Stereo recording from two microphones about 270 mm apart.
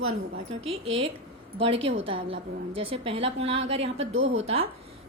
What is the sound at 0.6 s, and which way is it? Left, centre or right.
A woman's voice, right.